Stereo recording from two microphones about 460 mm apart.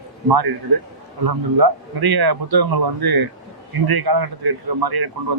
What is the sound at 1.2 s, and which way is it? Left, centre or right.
Speech, right.